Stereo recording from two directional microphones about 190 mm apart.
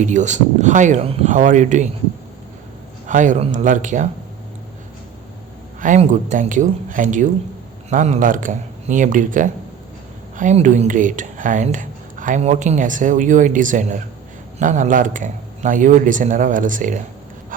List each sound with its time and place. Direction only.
0.0 s speech: 40° right (ahead or behind)
3.1 s speech: 40° right (ahead or behind)
5.8 s speech: 40° right (ahead or behind)